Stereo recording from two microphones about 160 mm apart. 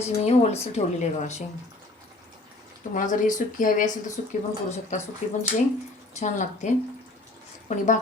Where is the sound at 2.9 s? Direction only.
55° left (ahead or behind).